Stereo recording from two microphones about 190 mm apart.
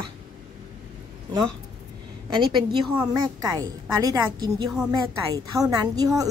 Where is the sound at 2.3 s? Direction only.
25° right (ahead or behind).